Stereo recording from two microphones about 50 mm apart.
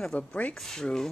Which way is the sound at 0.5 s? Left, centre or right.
Centre.